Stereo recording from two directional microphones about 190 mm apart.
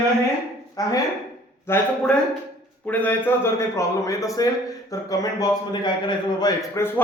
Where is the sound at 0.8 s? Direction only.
20° left (ahead or behind).